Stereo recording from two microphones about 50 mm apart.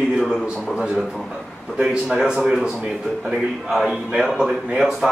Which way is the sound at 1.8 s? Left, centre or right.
Centre.